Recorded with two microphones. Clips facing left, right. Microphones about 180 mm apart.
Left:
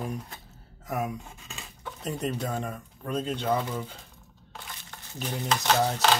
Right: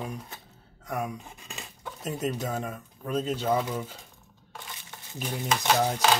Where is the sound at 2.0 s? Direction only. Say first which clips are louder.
Even; 5° right (ahead or behind).